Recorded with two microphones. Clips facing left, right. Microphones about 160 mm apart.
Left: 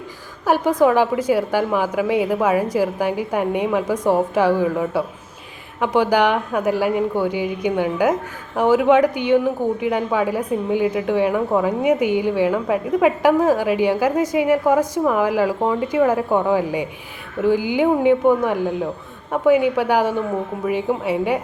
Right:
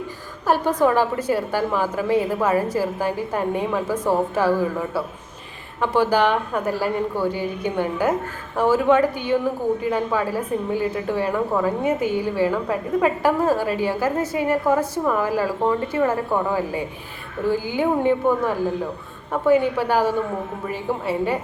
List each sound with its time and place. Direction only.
0.4 s a woman's voice: 10° left (ahead or behind)